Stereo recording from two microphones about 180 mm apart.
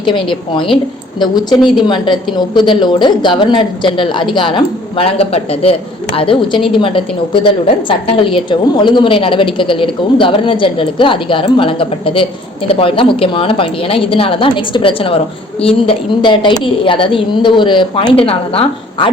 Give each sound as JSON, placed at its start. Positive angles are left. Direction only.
{"t": 0.0, "sound": "a woman's voice", "side_deg": 30}
{"t": 1.5, "sound": "a woman's voice", "side_deg": 0}
{"t": 1.9, "sound": "a woman's voice", "side_deg": 25}